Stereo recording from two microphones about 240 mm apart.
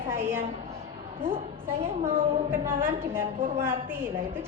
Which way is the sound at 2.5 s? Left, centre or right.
Centre.